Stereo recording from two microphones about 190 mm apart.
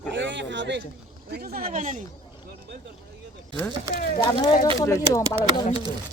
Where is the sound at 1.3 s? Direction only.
55° right (ahead or behind).